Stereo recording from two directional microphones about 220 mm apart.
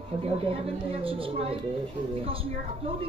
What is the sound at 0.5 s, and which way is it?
A woman's voice, 25° right (ahead or behind).